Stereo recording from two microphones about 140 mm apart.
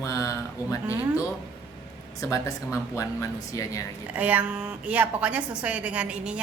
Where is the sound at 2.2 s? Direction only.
25° left (ahead or behind).